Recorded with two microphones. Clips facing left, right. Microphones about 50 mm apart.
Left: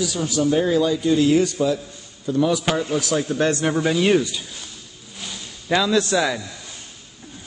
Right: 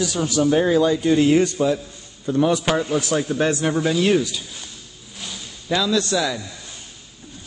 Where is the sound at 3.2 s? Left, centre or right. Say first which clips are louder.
Even; centre.